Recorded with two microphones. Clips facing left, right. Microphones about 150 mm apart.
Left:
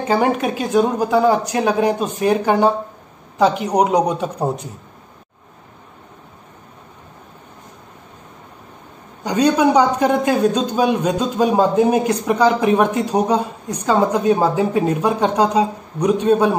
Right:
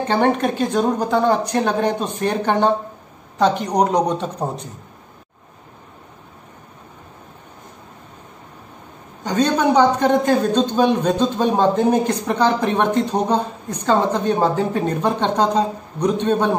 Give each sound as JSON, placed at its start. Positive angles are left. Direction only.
{"t": 0.0, "sound": "speech", "side_deg": 5}
{"t": 9.2, "sound": "speech", "side_deg": 10}